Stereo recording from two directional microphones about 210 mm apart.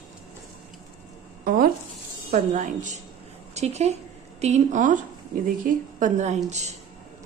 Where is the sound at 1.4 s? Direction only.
45° right (ahead or behind).